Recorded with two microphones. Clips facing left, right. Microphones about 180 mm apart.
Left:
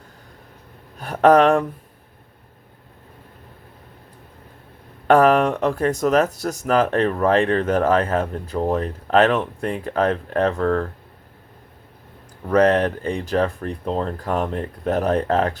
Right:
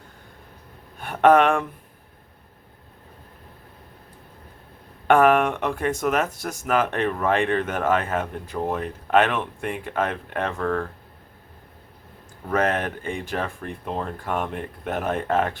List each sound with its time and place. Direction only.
0.9 s a sound: 40° left (ahead or behind)
5.0 s speech: 40° left (ahead or behind)
12.5 s speech: 35° left (ahead or behind)